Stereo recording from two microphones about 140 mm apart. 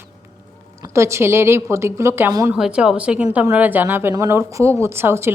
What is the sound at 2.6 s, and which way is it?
A woman's voice, 5° right (ahead or behind).